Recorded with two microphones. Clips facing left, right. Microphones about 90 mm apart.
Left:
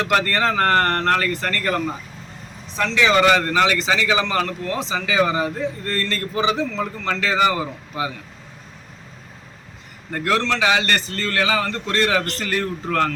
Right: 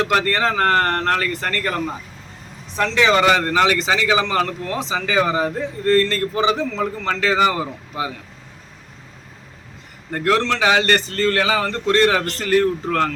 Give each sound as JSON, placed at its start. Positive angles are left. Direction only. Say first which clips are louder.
{"t": 0.0, "sound": "speech", "louder": "right 1 dB", "side_deg": -15}
{"t": 10.1, "sound": "speech", "louder": "right 3 dB", "side_deg": -20}
{"t": 10.6, "sound": "speech", "louder": "right 3 dB", "side_deg": -35}